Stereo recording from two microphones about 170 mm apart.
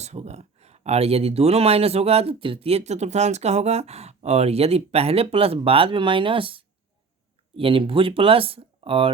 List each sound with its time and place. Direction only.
0.0 s speech: 40° right (ahead or behind)